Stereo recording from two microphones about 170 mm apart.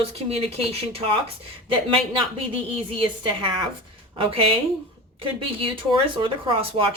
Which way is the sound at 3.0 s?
30° right (ahead or behind).